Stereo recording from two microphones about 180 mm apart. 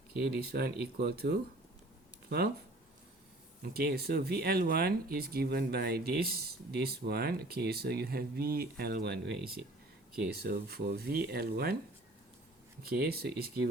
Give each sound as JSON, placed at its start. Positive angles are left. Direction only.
{"t": 0.2, "sound": "speech", "side_deg": -60}
{"t": 3.6, "sound": "speech", "side_deg": -60}
{"t": 12.8, "sound": "speech", "side_deg": -60}